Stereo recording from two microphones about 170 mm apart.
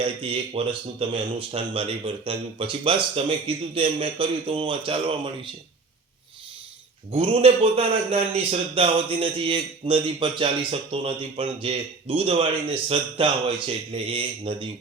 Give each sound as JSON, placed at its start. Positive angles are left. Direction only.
{"t": 0.0, "sound": "speech", "side_deg": -35}
{"t": 7.1, "sound": "speech", "side_deg": -35}